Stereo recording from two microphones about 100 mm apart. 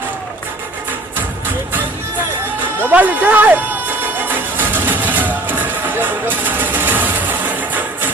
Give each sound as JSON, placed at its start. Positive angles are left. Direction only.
{"t": 2.7, "sound": "music", "side_deg": -20}